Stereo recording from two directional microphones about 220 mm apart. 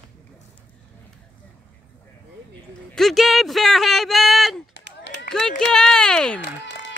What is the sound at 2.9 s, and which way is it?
Speech, centre (ahead or behind).